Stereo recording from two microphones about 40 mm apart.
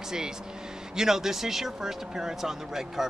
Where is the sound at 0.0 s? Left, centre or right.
Centre.